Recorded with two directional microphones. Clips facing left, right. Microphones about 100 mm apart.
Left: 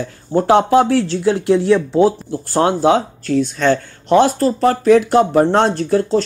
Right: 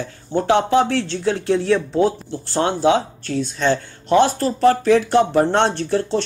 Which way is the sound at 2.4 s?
45° left (ahead or behind).